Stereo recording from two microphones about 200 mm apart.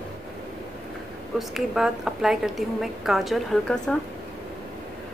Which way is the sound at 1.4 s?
Centre (ahead or behind).